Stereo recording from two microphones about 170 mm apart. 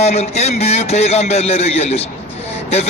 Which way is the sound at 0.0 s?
40° left (ahead or behind).